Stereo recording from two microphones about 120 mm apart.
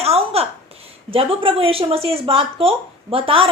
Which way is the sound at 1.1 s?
50° right (ahead or behind).